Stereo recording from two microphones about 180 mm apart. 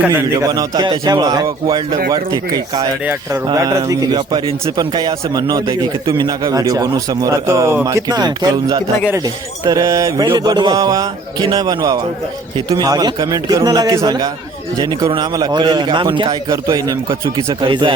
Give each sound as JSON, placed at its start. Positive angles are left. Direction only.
{"t": 0.3, "sound": "a man's voice", "side_deg": -20}